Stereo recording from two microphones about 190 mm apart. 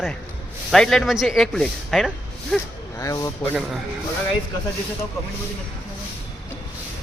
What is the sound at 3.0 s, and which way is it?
Speech, 15° left (ahead or behind).